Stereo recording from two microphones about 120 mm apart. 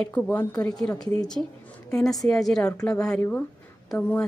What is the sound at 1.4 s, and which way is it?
Speech, 25° left (ahead or behind).